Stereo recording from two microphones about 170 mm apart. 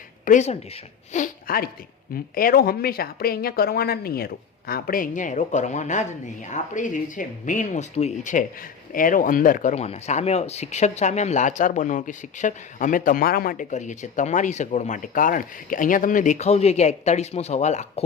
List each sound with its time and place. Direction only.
0.3 s speech: 45° left (ahead or behind)